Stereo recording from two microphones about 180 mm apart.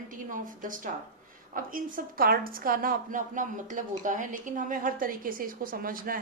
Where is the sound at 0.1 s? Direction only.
45° right (ahead or behind).